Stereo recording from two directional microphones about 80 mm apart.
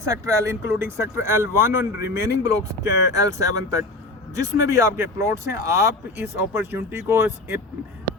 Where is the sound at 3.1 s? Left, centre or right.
Right.